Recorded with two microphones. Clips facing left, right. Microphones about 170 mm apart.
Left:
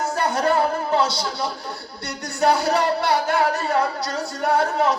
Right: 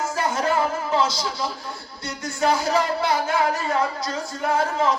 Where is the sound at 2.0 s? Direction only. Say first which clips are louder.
Left 2 dB; 65° left (ahead or behind).